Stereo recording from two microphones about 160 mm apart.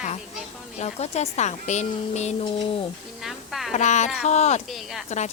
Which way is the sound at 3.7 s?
45° left (ahead or behind).